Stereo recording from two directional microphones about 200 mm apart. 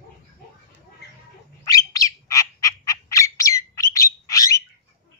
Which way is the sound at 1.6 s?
15° left (ahead or behind).